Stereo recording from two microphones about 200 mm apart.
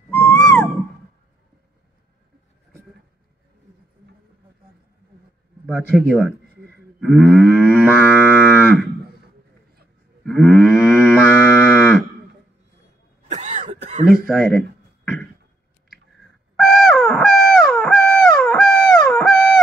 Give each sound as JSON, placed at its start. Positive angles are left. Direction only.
{"t": 0.1, "sound": "music", "side_deg": 5}
{"t": 5.7, "sound": "cattle", "side_deg": 5}
{"t": 10.2, "sound": "moo", "side_deg": 5}
{"t": 13.3, "sound": "cough", "side_deg": -35}
{"t": 14.2, "sound": "cattle", "side_deg": 5}
{"t": 16.5, "sound": "owl", "side_deg": 0}